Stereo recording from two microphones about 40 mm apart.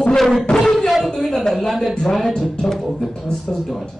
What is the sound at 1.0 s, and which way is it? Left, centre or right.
A man's voice, centre.